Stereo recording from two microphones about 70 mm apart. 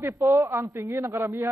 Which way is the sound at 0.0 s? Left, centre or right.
Right.